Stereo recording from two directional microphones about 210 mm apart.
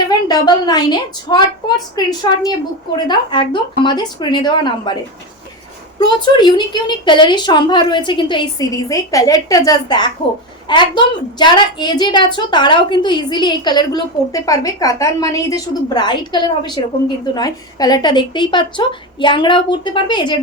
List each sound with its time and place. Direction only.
0.1 s a woman's voice: 20° left (ahead or behind)
6.3 s a woman's voice: 20° left (ahead or behind)